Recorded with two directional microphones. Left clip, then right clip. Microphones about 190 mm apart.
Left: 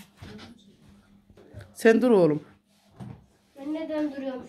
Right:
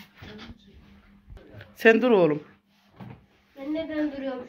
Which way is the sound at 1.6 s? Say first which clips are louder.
Right 1 dB; 15° left (ahead or behind).